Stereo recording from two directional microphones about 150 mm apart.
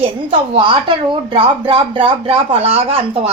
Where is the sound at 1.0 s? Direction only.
35° right (ahead or behind).